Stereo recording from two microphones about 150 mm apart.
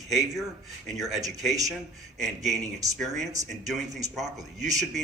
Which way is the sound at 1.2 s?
Centre (ahead or behind).